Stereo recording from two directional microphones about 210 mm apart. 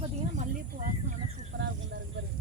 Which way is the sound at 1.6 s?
60° right (ahead or behind).